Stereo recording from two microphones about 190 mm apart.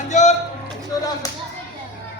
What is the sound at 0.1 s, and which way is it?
Music, 40° left (ahead or behind).